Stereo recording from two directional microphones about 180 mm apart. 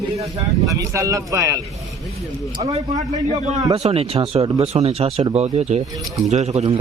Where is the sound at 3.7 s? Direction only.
35° right (ahead or behind).